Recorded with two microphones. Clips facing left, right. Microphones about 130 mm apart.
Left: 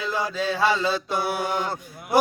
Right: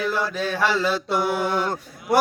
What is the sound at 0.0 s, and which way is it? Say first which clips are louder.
Mantra: right 2 dB; 15° left (ahead or behind).